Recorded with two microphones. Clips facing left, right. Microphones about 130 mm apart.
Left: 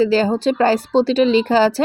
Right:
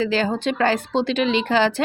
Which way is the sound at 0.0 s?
35° left (ahead or behind).